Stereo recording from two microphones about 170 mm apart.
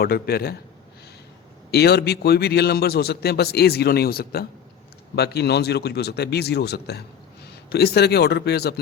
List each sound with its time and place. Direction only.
0.0 s a man's voice: 65° left (ahead or behind)
1.7 s a man's voice: 70° left (ahead or behind)